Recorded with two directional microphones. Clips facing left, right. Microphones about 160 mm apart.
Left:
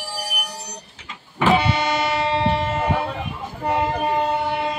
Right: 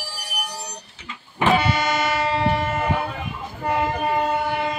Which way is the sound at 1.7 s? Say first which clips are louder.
Left 1 dB; 30° left (ahead or behind).